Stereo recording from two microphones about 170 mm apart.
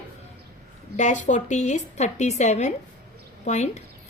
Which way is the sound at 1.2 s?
45° left (ahead or behind).